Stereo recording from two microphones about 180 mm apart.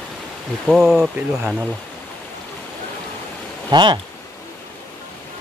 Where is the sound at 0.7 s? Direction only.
Centre (ahead or behind).